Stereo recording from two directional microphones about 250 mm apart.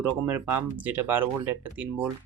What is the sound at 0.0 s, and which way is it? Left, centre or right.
Speech, centre.